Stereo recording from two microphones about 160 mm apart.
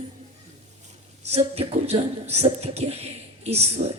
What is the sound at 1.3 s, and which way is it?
A woman's voice, 40° right (ahead or behind).